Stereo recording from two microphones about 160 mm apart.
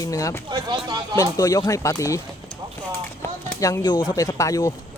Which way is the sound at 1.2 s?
20° left (ahead or behind).